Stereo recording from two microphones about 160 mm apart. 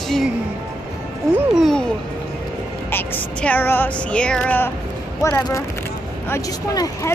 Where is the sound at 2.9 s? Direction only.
15° left (ahead or behind).